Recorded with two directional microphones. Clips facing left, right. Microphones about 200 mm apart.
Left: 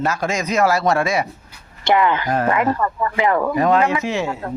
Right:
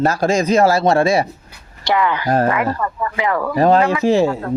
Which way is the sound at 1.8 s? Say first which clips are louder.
Left 1 dB; 20° left (ahead or behind).